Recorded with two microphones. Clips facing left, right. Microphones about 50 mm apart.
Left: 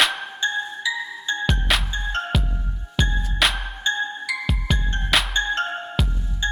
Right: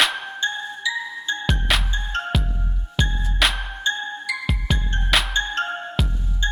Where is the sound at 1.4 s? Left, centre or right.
Centre.